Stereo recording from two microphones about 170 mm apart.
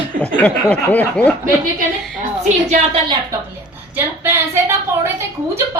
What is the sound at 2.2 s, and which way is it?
Speech, 45° right (ahead or behind).